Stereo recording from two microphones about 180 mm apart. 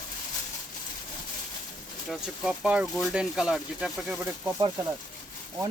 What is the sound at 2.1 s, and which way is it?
Speech, centre (ahead or behind).